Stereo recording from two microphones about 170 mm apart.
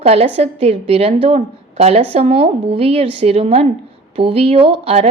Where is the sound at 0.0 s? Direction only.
35° right (ahead or behind).